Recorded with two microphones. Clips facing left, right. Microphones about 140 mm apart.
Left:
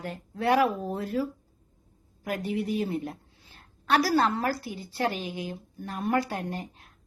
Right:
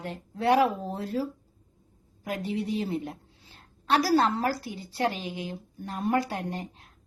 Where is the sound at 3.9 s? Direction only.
35° right (ahead or behind).